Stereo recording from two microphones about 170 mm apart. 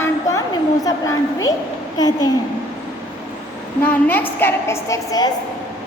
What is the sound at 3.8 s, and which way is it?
A woman's voice, 10° left (ahead or behind).